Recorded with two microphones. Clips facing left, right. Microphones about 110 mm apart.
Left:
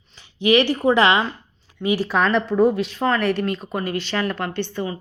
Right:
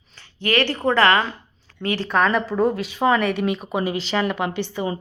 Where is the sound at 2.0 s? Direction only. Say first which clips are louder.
Right 3 dB; centre (ahead or behind).